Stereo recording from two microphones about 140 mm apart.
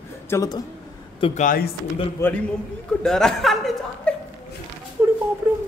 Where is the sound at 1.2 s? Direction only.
60° left (ahead or behind).